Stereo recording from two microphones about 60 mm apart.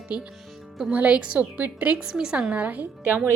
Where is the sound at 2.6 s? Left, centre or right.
Right.